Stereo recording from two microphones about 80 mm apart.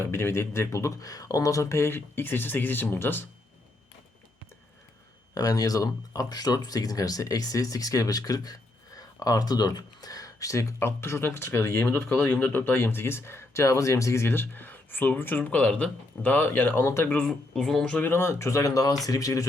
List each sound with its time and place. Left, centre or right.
0.0 s speech: left
5.3 s speech: left
12.0 s speech: centre
17.1 s speech: centre
17.5 s speech: centre
18.1 s speech: left